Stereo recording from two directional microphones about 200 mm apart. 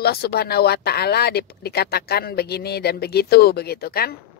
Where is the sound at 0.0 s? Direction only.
50° left (ahead or behind).